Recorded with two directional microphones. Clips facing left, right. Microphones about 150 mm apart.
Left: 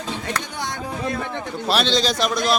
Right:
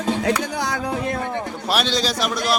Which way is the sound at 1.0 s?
55° right (ahead or behind).